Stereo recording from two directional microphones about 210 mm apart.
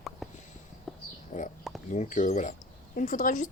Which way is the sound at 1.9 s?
35° left (ahead or behind).